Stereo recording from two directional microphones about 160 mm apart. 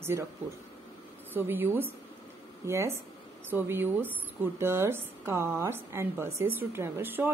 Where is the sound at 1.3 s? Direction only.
15° right (ahead or behind).